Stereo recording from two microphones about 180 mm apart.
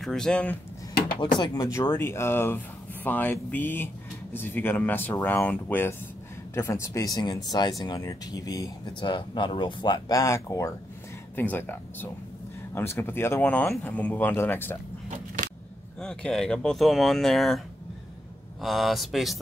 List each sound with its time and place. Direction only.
0.0 s speech: 5° left (ahead or behind)
1.4 s speech: 20° left (ahead or behind)
15.0 s a sound: 45° right (ahead or behind)
16.0 s speech: 5° left (ahead or behind)
18.6 s speech: centre (ahead or behind)